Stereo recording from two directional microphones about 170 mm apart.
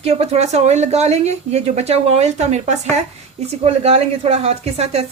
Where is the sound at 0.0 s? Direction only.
35° right (ahead or behind).